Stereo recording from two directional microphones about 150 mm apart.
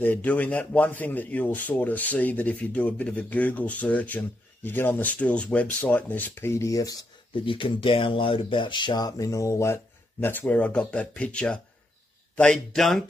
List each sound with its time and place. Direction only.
0.0 s speech: 10° left (ahead or behind)